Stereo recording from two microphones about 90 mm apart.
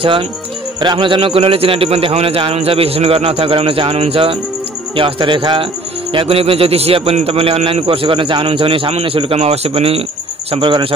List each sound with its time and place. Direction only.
0.0 s speech: 85° right
0.7 s a man's voice: 65° right (ahead or behind); by 4.4 s 90° right
4.9 s speech: 70° right (ahead or behind)
6.1 s a man's voice: 90° right
10.5 s speech: 75° right (ahead or behind)